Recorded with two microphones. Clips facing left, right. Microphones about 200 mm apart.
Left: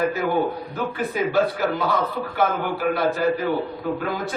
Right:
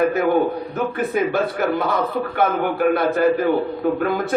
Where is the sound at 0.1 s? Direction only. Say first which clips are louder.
Right 4 dB; 50° right (ahead or behind).